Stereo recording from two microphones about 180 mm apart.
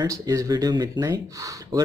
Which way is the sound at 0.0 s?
20° right (ahead or behind).